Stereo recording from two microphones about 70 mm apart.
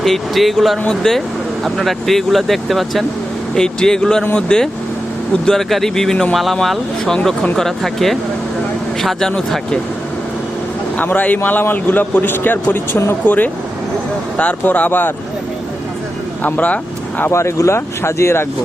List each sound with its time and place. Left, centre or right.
0.0 s a man's voice: centre
7.0 s a man's voice: centre
10.9 s a man's voice: left
13.2 s a man's voice: left
16.4 s speech: left
17.3 s speech: left